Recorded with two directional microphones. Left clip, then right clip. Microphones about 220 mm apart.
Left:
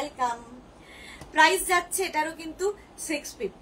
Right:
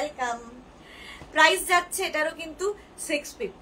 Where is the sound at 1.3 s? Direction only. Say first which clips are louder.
Right 1 dB; 15° right (ahead or behind).